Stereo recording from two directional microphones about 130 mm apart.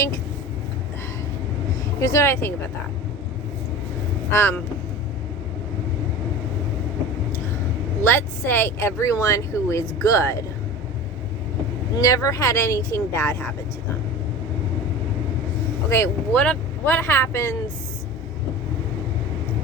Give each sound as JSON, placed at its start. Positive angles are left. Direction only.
{"t": 2.0, "sound": "speech", "side_deg": 25}
{"t": 4.3, "sound": "speech", "side_deg": 15}
{"t": 8.0, "sound": "speech", "side_deg": 15}
{"t": 11.9, "sound": "speech", "side_deg": 25}
{"t": 15.9, "sound": "speech", "side_deg": 15}